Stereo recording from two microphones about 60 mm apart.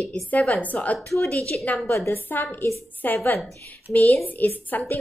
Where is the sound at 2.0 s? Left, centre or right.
Left.